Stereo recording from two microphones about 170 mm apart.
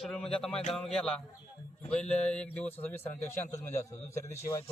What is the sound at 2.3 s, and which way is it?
A man's voice, 10° left (ahead or behind).